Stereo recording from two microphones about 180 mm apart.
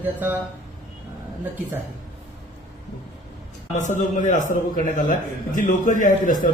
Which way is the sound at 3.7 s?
40° left (ahead or behind).